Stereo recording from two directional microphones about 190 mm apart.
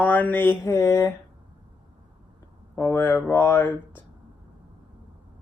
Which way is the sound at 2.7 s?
10° left (ahead or behind).